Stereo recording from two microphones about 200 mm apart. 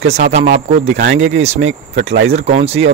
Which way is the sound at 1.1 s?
75° right (ahead or behind).